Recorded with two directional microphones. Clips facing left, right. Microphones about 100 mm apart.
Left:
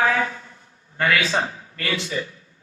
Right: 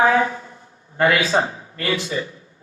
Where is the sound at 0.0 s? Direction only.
25° right (ahead or behind).